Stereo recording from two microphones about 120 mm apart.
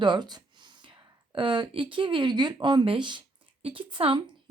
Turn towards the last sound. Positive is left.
turn(degrees=-45)  # may be behind; listen again after turning